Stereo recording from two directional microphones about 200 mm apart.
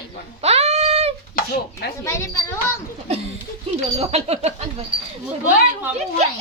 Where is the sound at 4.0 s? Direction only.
30° right (ahead or behind).